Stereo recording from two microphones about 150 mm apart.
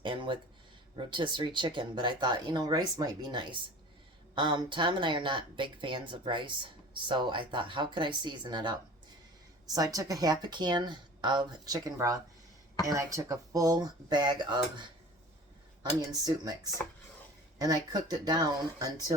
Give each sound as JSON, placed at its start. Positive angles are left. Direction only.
{"t": 0.0, "sound": "speech", "side_deg": -35}
{"t": 16.8, "sound": "speech", "side_deg": 10}
{"t": 17.6, "sound": "speech", "side_deg": -25}